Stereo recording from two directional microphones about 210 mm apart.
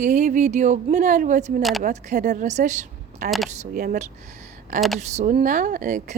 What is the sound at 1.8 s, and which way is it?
Speech, 35° right (ahead or behind).